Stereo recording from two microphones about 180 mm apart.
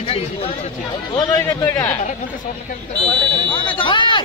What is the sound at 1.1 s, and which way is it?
Speech, 20° left (ahead or behind).